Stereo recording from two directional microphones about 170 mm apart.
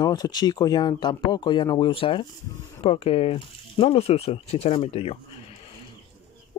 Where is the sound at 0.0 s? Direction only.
25° left (ahead or behind).